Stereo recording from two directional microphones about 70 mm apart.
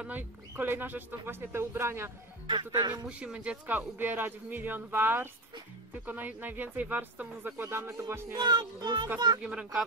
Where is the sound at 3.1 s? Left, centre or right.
Centre.